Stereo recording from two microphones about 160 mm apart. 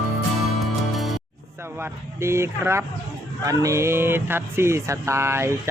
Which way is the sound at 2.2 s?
15° right (ahead or behind).